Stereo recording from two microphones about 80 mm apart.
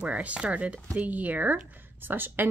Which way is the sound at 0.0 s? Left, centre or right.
Centre.